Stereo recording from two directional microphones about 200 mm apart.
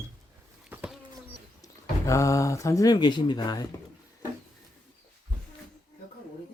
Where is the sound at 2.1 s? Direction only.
15° left (ahead or behind).